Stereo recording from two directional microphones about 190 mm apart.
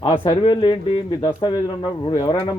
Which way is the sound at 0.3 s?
30° left (ahead or behind).